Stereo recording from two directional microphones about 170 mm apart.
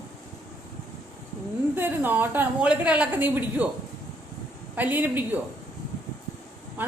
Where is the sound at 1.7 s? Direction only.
10° right (ahead or behind).